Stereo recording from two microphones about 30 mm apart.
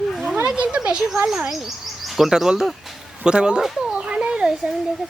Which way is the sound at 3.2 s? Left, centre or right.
Right.